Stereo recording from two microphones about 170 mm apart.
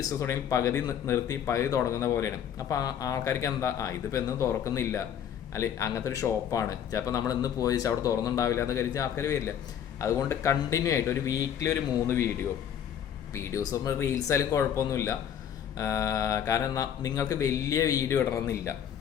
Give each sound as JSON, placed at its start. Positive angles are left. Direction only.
{"t": 0.0, "sound": "a man's voice", "side_deg": 20}